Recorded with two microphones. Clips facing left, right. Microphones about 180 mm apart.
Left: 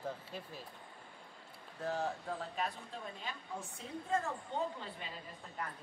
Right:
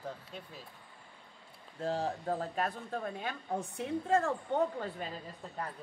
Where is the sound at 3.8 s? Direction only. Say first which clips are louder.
Right 7 dB; 75° right (ahead or behind).